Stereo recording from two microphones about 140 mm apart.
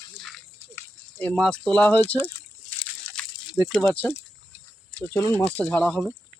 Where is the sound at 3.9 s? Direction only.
15° left (ahead or behind).